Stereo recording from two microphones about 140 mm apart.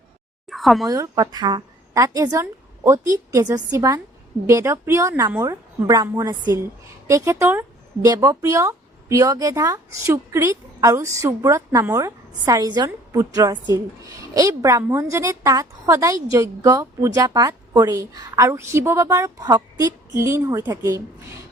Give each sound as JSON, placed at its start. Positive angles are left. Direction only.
{"t": 0.5, "sound": "speech", "side_deg": 0}
{"t": 0.9, "sound": "speech", "side_deg": -25}